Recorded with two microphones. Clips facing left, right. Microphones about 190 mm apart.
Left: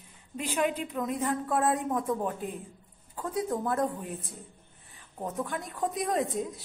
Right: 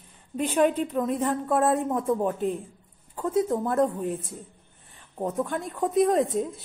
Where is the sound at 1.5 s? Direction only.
25° right (ahead or behind).